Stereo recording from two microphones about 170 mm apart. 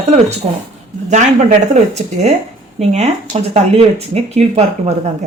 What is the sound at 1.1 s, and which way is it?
Speech, 45° right (ahead or behind).